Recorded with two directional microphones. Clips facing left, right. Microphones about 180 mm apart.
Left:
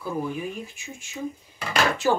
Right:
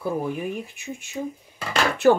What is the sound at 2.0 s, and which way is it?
Speech, 55° right (ahead or behind).